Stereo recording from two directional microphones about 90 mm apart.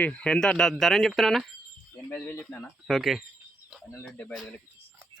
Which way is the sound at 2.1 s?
15° left (ahead or behind).